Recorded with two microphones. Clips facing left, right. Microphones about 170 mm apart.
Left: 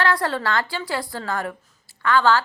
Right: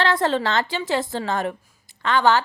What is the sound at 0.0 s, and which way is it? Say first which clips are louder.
A woman's voice: right 2 dB; 20° right (ahead or behind).